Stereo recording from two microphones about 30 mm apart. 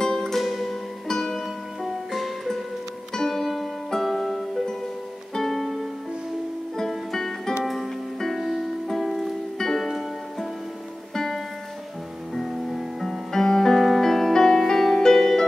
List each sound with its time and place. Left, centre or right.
0.0 s music: centre
0.4 s music: centre
1.0 s music: centre
1.8 s music: centre
6.9 s music: centre
12.4 s music: centre
13.3 s music: centre
13.7 s music: centre